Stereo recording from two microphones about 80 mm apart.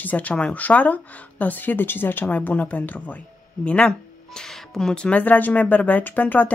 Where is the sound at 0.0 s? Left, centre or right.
Centre.